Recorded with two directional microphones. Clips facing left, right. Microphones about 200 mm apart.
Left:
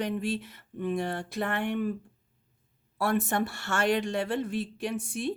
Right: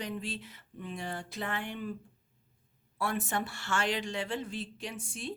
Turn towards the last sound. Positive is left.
turn(degrees=65)  # may be behind; listen again after turning